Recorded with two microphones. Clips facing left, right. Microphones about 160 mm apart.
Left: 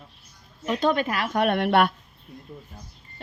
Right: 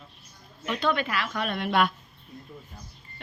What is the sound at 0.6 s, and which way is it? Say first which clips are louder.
A woman's voice: left 4 dB; 40° left (ahead or behind).